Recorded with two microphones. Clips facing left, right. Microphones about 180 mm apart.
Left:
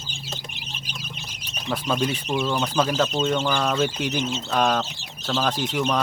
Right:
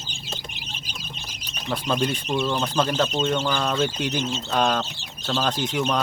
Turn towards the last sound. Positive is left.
turn(degrees=0)  # may be behind; listen again after turning